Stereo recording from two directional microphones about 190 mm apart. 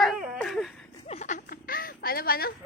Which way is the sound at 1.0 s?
35° left (ahead or behind).